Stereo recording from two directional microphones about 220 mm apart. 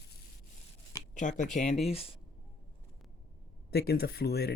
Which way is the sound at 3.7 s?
45° left (ahead or behind).